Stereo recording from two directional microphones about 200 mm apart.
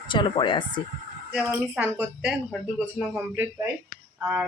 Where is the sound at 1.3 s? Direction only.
5° right (ahead or behind).